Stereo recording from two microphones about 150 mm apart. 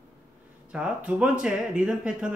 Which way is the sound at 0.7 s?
5° right (ahead or behind).